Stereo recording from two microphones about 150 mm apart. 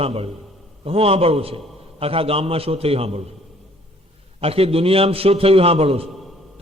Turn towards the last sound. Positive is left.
turn(degrees=0)  # may be behind; listen again after turning